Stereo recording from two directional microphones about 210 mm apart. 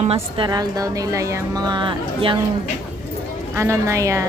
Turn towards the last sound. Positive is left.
turn(degrees=-15)  # may be behind; listen again after turning